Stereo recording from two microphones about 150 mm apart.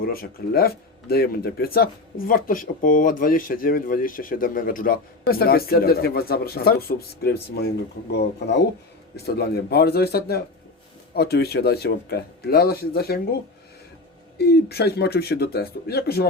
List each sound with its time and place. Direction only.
0.0 s speech: 85° left
9.1 s speech: 90° left
14.3 s speech: 90° left